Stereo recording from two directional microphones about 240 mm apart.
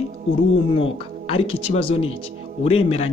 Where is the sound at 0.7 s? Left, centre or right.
Left.